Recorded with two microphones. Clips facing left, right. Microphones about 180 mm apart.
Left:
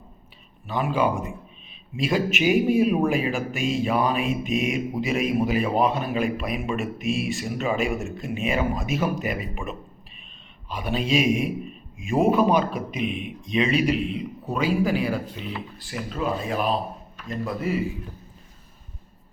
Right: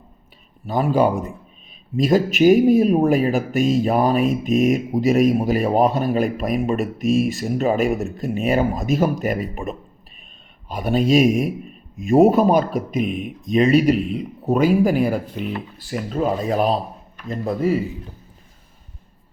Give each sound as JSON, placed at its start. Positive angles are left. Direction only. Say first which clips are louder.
{"t": 0.7, "sound": "speech", "louder": "right 6 dB", "side_deg": -40}